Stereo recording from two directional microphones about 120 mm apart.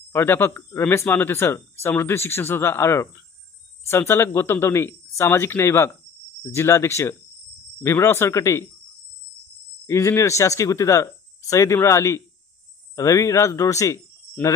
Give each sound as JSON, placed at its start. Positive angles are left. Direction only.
{"t": 0.1, "sound": "speech", "side_deg": 20}
{"t": 9.8, "sound": "speech", "side_deg": 25}